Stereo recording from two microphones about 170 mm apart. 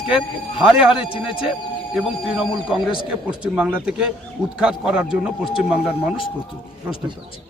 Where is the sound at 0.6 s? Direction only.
5° right (ahead or behind).